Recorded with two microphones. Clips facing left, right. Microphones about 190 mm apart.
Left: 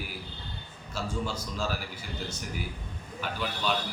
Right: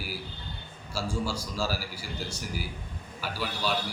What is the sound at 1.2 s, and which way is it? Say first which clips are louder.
Speech: right 1 dB; 5° right (ahead or behind).